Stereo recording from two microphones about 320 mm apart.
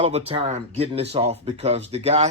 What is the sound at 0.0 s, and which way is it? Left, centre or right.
Speech, centre.